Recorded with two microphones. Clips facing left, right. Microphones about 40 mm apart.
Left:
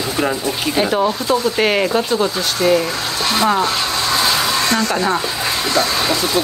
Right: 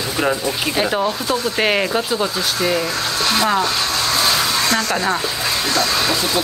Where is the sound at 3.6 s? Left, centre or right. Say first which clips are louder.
Left 1 dB; left.